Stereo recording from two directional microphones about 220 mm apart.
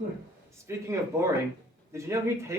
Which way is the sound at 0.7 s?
15° right (ahead or behind).